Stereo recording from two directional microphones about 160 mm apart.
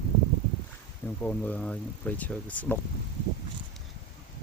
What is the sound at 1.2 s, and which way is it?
Speech, 10° left (ahead or behind).